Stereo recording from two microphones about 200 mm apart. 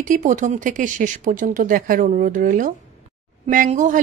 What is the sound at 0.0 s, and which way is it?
Speech, 40° right (ahead or behind).